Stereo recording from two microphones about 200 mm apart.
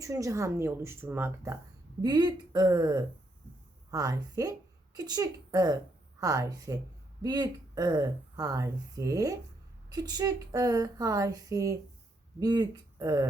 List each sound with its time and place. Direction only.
0.0 s a woman's voice: 15° right (ahead or behind)